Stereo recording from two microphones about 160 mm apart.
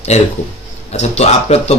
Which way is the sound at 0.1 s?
45° left (ahead or behind).